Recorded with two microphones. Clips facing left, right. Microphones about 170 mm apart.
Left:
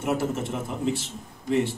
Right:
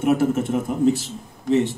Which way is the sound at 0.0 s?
55° right (ahead or behind).